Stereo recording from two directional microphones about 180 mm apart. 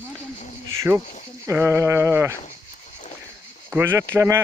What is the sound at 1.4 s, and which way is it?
Speech, 15° right (ahead or behind).